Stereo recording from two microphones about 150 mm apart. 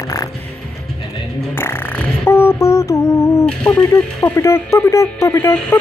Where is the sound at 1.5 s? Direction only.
15° left (ahead or behind).